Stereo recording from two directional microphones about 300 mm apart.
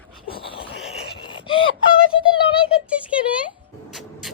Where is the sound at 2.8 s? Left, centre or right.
Centre.